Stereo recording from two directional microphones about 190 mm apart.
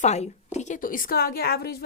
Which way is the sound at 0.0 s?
35° left (ahead or behind).